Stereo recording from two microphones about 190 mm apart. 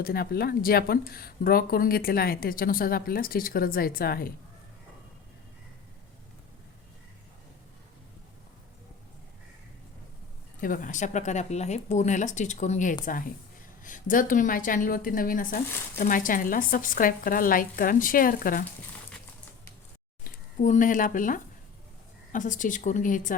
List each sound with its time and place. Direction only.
0.0 s a woman's voice: 55° left (ahead or behind)
10.6 s a woman's voice: 45° left (ahead or behind)
20.2 s a woman's voice: 45° left (ahead or behind)